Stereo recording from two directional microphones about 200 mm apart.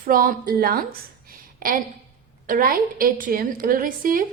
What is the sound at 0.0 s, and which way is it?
A woman's voice, 45° right (ahead or behind).